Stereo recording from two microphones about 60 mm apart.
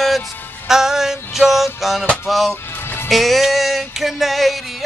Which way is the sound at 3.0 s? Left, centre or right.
Centre.